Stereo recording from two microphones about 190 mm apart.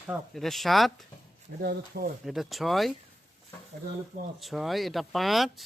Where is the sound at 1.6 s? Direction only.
55° right (ahead or behind).